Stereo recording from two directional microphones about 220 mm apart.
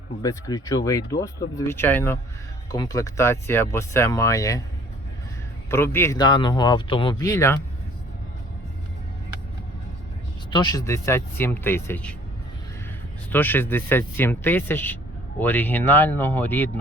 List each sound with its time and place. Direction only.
0.2 s speech: 15° left (ahead or behind)
5.7 s speech: 10° left (ahead or behind)
10.5 s speech: 20° left (ahead or behind)
13.3 s speech: 10° left (ahead or behind)